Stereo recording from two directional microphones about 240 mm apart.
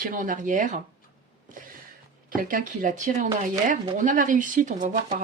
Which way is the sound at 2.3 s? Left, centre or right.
Right.